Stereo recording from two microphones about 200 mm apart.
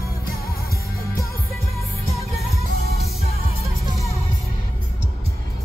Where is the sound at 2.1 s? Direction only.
30° right (ahead or behind).